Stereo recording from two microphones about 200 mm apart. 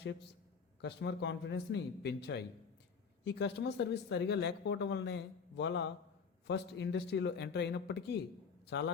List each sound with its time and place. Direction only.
0.8 s speech: 55° left (ahead or behind)